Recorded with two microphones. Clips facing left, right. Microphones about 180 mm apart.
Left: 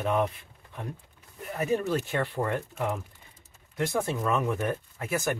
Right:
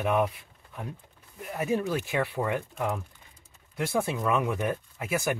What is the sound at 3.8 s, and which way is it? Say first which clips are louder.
Speech: even; 10° right (ahead or behind).